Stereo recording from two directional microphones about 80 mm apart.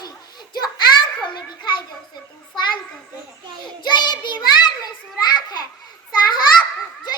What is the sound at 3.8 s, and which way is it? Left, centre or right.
Child singing, left.